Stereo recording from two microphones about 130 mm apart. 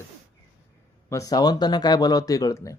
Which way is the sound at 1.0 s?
25° left (ahead or behind).